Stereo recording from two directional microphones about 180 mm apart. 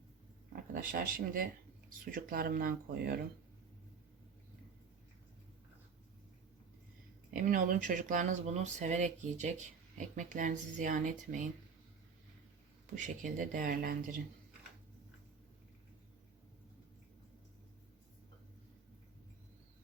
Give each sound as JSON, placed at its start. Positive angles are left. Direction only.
{"t": 0.7, "sound": "speech", "side_deg": -50}
{"t": 7.3, "sound": "speech", "side_deg": -50}
{"t": 13.0, "sound": "speech", "side_deg": -45}